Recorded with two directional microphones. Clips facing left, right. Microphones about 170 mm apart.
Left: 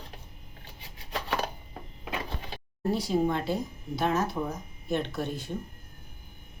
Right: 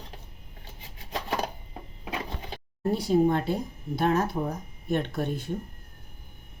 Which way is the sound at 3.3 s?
55° right (ahead or behind).